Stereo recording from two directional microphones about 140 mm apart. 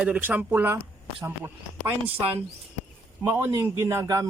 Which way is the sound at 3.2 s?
20° right (ahead or behind).